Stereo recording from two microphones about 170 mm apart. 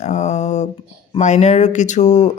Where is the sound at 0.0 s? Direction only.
45° left (ahead or behind).